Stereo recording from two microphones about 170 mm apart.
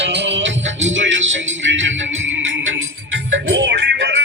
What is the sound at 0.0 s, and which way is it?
Music, 90° right.